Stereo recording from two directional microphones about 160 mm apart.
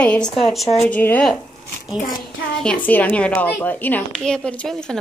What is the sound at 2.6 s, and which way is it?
A woman's voice, 10° left (ahead or behind).